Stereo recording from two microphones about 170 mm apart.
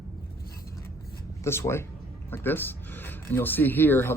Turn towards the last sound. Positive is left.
turn(degrees=15)  # may be behind; listen again after turning